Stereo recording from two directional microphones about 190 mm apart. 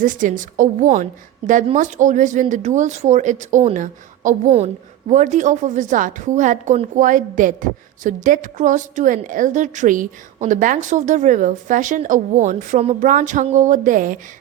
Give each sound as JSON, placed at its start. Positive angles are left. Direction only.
{"t": 0.0, "sound": "a woman's voice", "side_deg": -45}